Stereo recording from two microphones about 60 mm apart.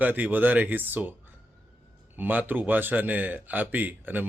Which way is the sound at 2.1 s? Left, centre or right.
Right.